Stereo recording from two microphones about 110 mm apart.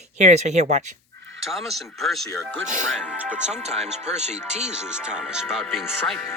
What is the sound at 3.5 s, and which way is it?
Speech, 90° right.